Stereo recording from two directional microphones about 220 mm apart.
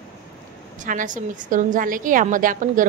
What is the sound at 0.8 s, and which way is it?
A woman's voice, 35° right (ahead or behind).